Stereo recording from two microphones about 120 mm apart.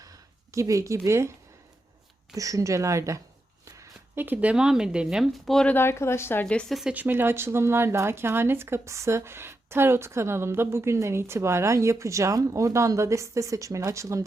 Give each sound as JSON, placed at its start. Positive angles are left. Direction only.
{"t": 0.0, "sound": "a sound", "side_deg": -30}
{"t": 2.3, "sound": "speech", "side_deg": -30}
{"t": 5.7, "sound": "speech", "side_deg": 20}
{"t": 6.4, "sound": "speech", "side_deg": 10}
{"t": 6.9, "sound": "speech", "side_deg": -15}